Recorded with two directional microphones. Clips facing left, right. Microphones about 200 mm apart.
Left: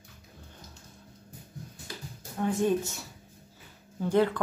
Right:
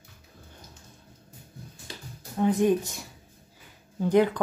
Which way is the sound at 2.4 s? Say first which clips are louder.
Right 4 dB; 15° right (ahead or behind).